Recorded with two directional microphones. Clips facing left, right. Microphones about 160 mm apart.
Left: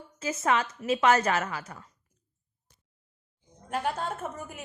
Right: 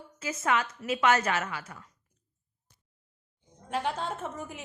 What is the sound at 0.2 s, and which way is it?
A woman's voice, 30° left (ahead or behind).